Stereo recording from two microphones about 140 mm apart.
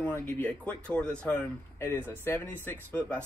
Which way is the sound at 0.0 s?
10° left (ahead or behind).